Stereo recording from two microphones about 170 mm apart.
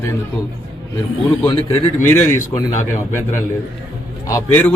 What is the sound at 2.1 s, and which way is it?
Speech, 15° left (ahead or behind).